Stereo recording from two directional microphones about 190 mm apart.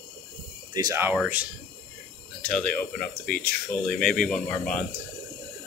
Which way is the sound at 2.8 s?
50° left (ahead or behind).